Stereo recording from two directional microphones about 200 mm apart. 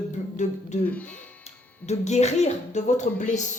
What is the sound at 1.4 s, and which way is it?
Speech, 35° left (ahead or behind).